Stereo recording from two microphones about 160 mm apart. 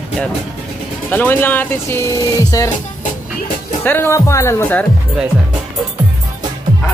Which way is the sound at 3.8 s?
10° left (ahead or behind).